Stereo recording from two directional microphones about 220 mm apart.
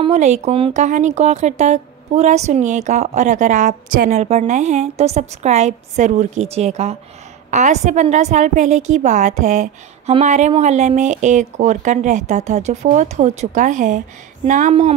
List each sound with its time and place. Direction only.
0.0 s a woman's voice: 30° right (ahead or behind)